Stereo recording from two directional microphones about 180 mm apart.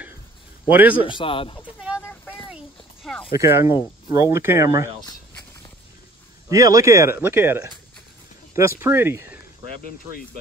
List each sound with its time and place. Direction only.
0.7 s speech: 10° right (ahead or behind)
1.0 s a man's voice: 30° left (ahead or behind)
2.0 s a sound: 10° left (ahead or behind)
2.5 s a sound: centre (ahead or behind)
3.3 s speech: 15° right (ahead or behind)
6.5 s speech: 20° right (ahead or behind)